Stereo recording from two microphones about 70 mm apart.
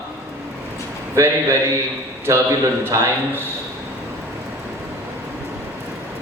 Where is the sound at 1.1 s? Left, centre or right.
Right.